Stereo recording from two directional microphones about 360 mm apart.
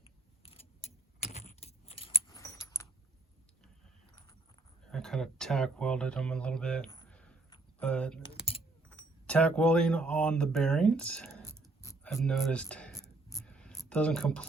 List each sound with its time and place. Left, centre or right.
0.0 s keys jangling: centre
4.9 s speech: centre
8.3 s typing: centre
9.2 s speech: centre